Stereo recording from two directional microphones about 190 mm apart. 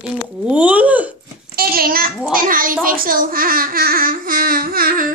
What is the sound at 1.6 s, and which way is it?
A child's voice, 50° right (ahead or behind).